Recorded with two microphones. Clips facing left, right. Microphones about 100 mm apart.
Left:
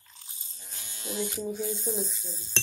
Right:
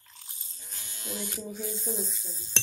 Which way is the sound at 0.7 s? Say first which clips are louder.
Left 2 dB; 25° left (ahead or behind).